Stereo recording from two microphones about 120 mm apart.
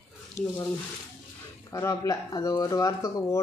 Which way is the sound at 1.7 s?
30° left (ahead or behind).